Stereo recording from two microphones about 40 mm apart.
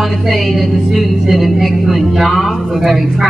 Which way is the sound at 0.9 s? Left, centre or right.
Centre.